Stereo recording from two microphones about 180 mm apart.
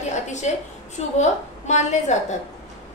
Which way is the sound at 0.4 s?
40° left (ahead or behind).